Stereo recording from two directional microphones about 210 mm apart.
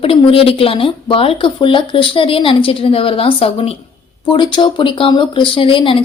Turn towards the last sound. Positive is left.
turn(degrees=25)  # may be behind; listen again after turning